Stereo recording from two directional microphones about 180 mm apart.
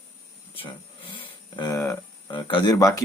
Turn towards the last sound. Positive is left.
turn(degrees=20)  # may be behind; listen again after turning